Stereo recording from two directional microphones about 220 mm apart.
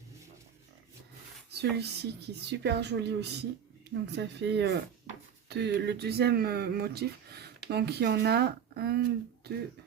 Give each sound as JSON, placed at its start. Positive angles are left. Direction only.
{"t": 1.5, "sound": "speech", "side_deg": -50}